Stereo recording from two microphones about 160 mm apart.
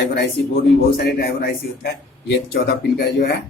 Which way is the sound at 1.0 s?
80° left.